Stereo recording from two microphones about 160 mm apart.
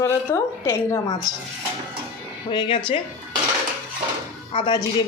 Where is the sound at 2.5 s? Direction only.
30° left (ahead or behind).